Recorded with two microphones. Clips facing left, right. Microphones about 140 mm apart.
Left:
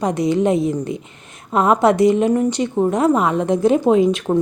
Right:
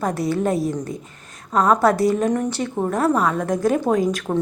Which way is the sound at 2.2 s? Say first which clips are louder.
Left 4 dB; 10° left (ahead or behind).